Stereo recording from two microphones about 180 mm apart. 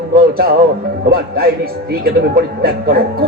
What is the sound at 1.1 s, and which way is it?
A man's voice, 60° right (ahead or behind).